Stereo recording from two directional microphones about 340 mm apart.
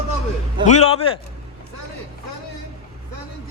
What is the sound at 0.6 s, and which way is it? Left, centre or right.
Speech, centre.